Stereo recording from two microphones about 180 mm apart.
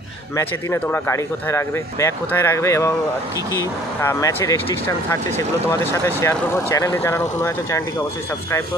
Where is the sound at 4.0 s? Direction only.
15° left (ahead or behind).